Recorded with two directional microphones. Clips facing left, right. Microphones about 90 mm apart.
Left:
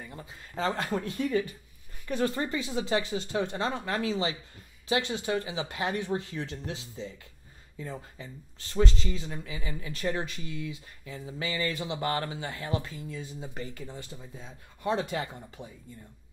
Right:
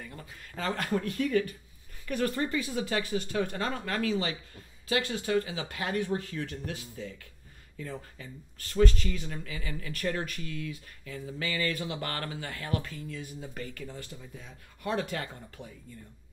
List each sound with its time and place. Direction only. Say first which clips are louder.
0.0 s speech: left 1 dB; 20° left (ahead or behind)